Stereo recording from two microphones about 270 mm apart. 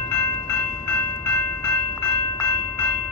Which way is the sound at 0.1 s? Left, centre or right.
Centre.